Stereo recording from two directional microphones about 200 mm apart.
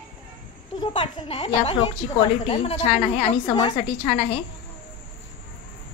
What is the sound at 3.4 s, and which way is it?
Speech, 20° left (ahead or behind).